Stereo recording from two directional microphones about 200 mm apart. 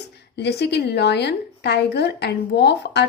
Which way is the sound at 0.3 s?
55° left (ahead or behind).